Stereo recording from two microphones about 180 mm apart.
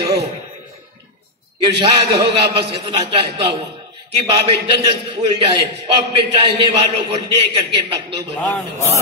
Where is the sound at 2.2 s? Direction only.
30° right (ahead or behind).